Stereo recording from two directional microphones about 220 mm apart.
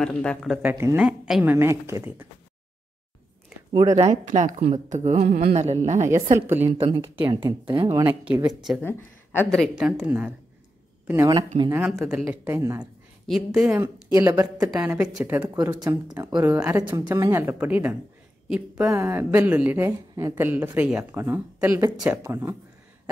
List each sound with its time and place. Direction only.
0.0 s a woman's voice: 5° left (ahead or behind)
3.7 s a woman's voice: 15° right (ahead or behind)
4.0 s a woman's voice: 30° right (ahead or behind)
5.9 s a woman's voice: 10° right (ahead or behind)
8.1 s a woman's voice: 5° right (ahead or behind)
8.4 s speech: 20° right (ahead or behind)
8.8 s a woman's voice: 10° left (ahead or behind); by 11.7 s 25° right (ahead or behind)
11.7 s a woman's voice: 10° right (ahead or behind)
13.3 s a woman's voice: centre (ahead or behind)
15.5 s a woman's voice: 20° right (ahead or behind)